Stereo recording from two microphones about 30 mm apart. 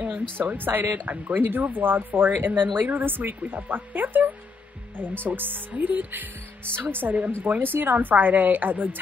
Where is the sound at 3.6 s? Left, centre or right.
Right.